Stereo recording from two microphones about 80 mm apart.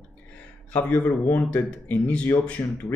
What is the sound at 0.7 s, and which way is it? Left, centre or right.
Speech, left.